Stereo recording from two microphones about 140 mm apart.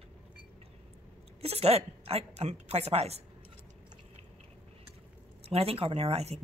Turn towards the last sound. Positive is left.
turn(degrees=-50)  # may be behind; listen again after turning